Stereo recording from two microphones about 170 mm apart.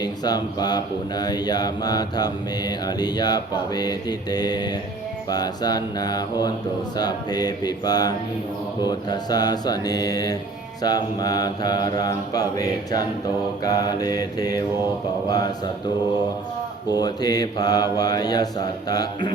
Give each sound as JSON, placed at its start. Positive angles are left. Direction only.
{"t": 0.0, "sound": "speech", "side_deg": 25}
{"t": 16.9, "sound": "speech", "side_deg": 25}